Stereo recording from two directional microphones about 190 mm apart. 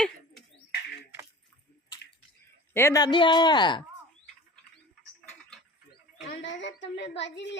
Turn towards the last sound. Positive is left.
turn(degrees=65)  # may be behind; listen again after turning